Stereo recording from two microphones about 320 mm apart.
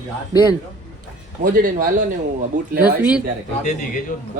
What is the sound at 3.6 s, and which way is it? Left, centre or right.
Speech, left.